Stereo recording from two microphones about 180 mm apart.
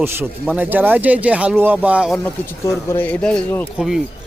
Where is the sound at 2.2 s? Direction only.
15° left (ahead or behind).